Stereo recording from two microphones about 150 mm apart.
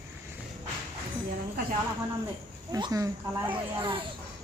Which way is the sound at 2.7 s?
25° right (ahead or behind).